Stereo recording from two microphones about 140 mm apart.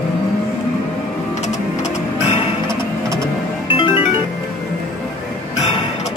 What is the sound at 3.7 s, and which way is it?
Music, 40° left (ahead or behind).